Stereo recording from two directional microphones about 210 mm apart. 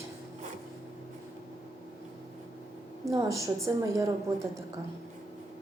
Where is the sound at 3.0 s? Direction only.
15° right (ahead or behind).